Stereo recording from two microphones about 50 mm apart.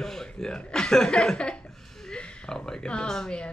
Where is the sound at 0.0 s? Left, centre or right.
Centre.